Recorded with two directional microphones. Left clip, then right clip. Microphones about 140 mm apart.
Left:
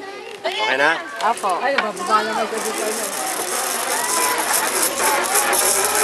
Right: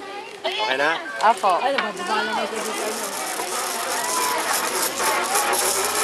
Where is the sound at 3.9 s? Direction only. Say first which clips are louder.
Left 3 dB; 20° left (ahead or behind).